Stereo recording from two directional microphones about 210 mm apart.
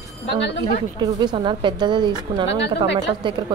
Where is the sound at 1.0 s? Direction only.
20° right (ahead or behind).